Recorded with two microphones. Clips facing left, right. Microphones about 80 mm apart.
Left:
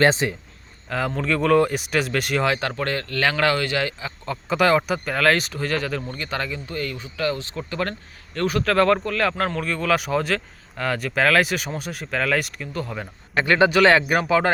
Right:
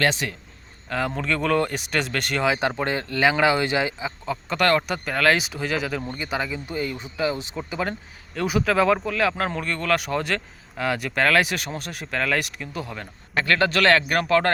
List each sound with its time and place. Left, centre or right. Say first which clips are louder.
0.0 s speech: left 5 dB; left
0.9 s speech: left 1 dB; centre
2.6 s speech: right 1 dB; centre
4.3 s speech: left 2 dB; centre
13.4 s speech: left 4 dB; centre